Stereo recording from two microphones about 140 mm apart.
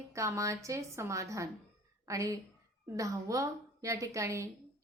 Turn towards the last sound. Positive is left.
turn(degrees=-20)  # may be behind; listen again after turning